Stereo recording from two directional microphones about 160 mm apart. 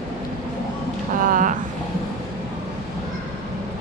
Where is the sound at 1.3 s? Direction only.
55° right (ahead or behind).